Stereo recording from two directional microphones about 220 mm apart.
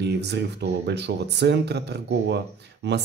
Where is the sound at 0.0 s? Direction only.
50° right (ahead or behind).